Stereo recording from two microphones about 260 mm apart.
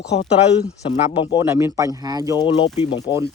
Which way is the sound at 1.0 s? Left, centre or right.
Left.